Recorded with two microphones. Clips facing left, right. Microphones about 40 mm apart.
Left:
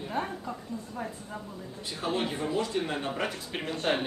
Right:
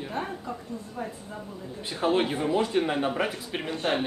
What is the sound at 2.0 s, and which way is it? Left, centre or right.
Speech, right.